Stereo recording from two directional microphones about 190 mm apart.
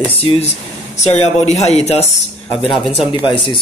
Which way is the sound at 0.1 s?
30° left (ahead or behind).